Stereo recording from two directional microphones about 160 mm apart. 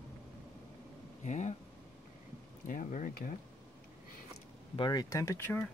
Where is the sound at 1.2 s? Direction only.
50° left (ahead or behind).